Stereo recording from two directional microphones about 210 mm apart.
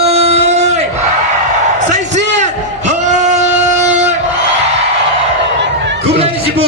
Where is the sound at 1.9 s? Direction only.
35° right (ahead or behind).